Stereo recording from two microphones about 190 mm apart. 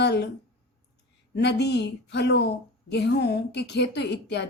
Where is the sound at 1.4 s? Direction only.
65° left (ahead or behind).